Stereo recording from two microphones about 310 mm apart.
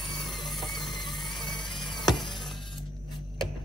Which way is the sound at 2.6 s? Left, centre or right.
Centre.